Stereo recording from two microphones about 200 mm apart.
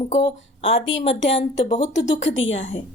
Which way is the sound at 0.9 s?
70° left (ahead or behind).